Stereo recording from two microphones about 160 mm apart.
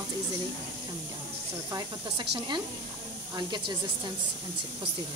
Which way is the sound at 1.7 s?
25° right (ahead or behind).